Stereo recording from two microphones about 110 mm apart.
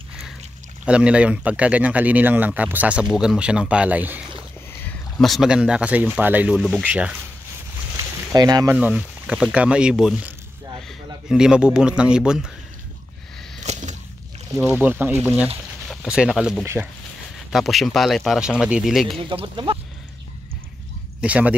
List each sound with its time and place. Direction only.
0.8 s speech: 10° right (ahead or behind)
5.1 s speech: centre (ahead or behind)
8.3 s speech: 35° right (ahead or behind)
8.7 s speech: 10° right (ahead or behind)
13.6 s a sound: 90° right
14.6 s speech: 15° right (ahead or behind)
15.9 s speech: 5° right (ahead or behind)
16.6 s speech: 20° right (ahead or behind)
17.5 s speech: centre (ahead or behind)
19.1 s speech: 50° right (ahead or behind)
21.2 s speech: 10° right (ahead or behind)